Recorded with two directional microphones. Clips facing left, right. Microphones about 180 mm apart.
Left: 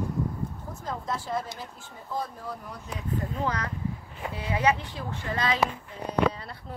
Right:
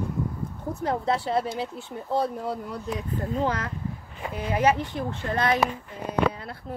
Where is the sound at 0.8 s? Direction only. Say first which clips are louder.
Right 8 dB; 70° right (ahead or behind).